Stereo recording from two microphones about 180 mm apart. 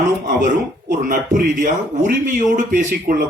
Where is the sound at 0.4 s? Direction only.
45° right (ahead or behind).